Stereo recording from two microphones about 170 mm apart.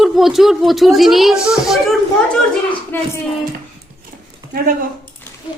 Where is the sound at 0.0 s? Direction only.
Centre (ahead or behind).